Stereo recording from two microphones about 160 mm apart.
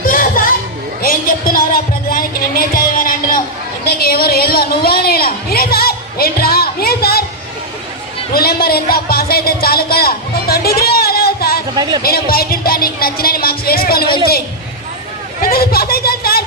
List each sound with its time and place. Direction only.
0.1 s a sound: 60° left (ahead or behind)
3.8 s a sound: 75° left (ahead or behind)
8.3 s a man's voice: 75° left (ahead or behind)
11.7 s speech: 25° right (ahead or behind)
12.0 s speech: 70° left (ahead or behind)
15.4 s speech: 70° left (ahead or behind)